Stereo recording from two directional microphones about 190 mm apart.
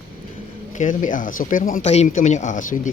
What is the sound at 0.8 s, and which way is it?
Speech, 40° left (ahead or behind).